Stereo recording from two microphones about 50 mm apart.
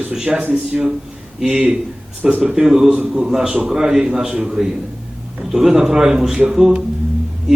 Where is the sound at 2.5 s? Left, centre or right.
Centre.